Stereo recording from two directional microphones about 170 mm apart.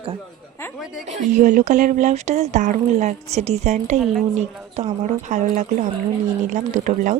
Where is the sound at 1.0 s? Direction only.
45° right (ahead or behind).